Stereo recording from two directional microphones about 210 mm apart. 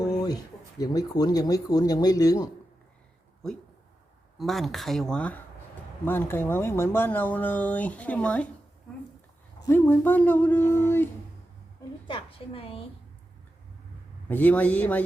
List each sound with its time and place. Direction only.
0.0 s a sound: 20° left (ahead or behind)
0.8 s speech: 20° left (ahead or behind)
4.4 s speech: centre (ahead or behind)
9.6 s speech: 10° left (ahead or behind)
12.0 s a woman's voice: 25° left (ahead or behind)
14.3 s speech: 10° left (ahead or behind)